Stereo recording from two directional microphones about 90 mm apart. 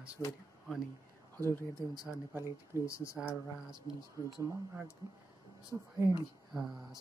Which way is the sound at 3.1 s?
15° right (ahead or behind).